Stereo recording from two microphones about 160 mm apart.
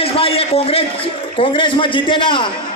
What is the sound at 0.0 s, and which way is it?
A man's voice, 35° left (ahead or behind).